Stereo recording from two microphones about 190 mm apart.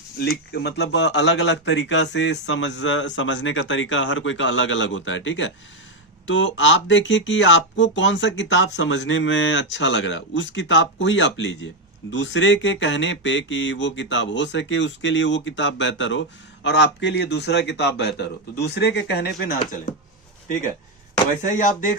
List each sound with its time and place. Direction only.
0.2 s a man's voice: 60° left (ahead or behind); by 21.9 s 40° left (ahead or behind)